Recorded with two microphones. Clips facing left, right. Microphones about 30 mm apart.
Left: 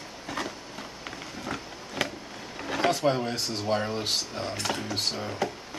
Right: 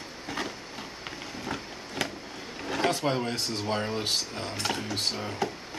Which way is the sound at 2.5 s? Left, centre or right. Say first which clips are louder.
Left 1 dB; centre.